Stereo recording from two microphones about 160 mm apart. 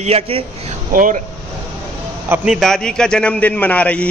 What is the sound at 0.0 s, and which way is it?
Speech, 40° right (ahead or behind).